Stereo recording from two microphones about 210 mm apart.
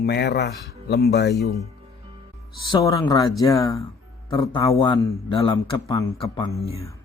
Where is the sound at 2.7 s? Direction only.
15° left (ahead or behind).